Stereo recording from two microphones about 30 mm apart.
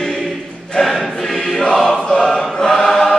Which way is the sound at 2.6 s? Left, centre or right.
Centre.